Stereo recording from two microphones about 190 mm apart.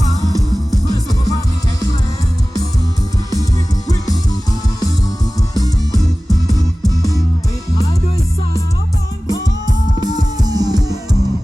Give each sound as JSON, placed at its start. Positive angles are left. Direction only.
{"t": 3.8, "sound": "music", "side_deg": 20}
{"t": 10.0, "sound": "music", "side_deg": -20}